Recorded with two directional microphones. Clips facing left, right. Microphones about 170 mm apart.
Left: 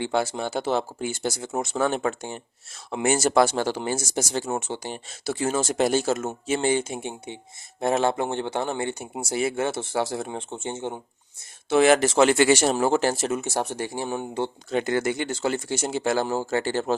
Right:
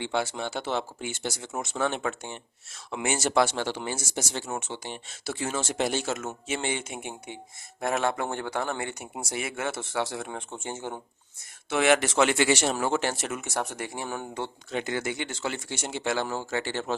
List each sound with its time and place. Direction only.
0.0 s a man's voice: 40° left (ahead or behind); by 11.0 s 25° left (ahead or behind)
11.7 s a man's voice: 35° left (ahead or behind)
14.7 s speech: 45° left (ahead or behind)